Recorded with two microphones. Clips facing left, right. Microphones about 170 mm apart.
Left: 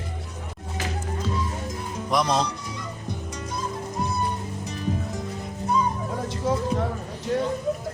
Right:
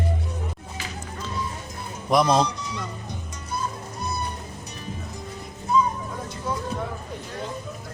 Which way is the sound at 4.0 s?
90° left.